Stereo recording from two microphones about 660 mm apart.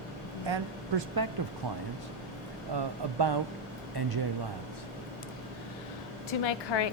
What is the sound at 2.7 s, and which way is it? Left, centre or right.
Speech, right.